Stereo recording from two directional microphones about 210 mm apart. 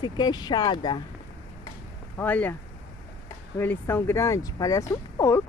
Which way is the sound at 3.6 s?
10° left (ahead or behind).